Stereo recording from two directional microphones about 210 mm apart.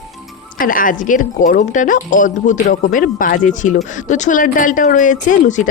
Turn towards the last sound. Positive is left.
turn(degrees=35)  # may be behind; listen again after turning